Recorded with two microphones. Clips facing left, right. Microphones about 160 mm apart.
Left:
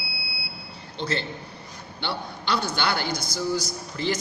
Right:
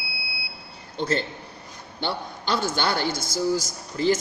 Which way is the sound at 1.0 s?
45° right (ahead or behind).